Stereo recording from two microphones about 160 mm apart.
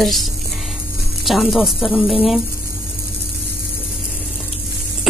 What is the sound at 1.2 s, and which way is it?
Speech, centre (ahead or behind).